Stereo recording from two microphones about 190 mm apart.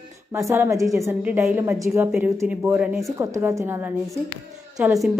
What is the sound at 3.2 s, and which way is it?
A woman's voice, 15° right (ahead or behind).